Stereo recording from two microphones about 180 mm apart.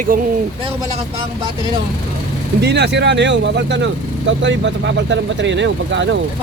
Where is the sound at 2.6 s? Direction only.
70° right (ahead or behind); by 6.0 s 90° right.